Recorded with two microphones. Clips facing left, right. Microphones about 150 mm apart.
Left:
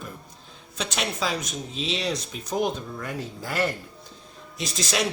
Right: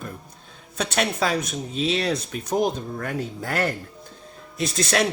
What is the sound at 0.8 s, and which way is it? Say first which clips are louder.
Speech: right 5 dB; 55° right (ahead or behind).